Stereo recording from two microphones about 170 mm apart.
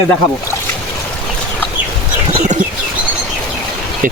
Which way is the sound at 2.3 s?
45° right (ahead or behind).